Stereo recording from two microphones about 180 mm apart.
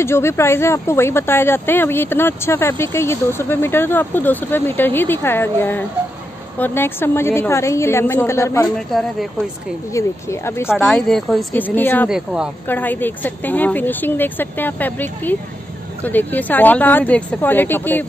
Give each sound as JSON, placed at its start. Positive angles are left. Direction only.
{"t": 0.0, "sound": "speech", "side_deg": 15}
{"t": 8.7, "sound": "a woman's voice", "side_deg": 0}
{"t": 9.9, "sound": "speech", "side_deg": 15}
{"t": 10.7, "sound": "a woman's voice", "side_deg": 0}
{"t": 12.1, "sound": "a woman's voice", "side_deg": -5}
{"t": 12.6, "sound": "speech", "side_deg": 10}